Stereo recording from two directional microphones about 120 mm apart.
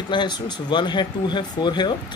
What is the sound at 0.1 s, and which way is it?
Speech, 40° left (ahead or behind).